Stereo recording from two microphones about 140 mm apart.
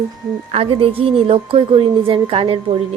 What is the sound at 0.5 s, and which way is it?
A woman's voice, 45° right (ahead or behind).